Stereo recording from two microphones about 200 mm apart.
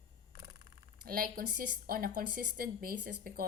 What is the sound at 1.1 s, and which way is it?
A woman's voice, 45° right (ahead or behind).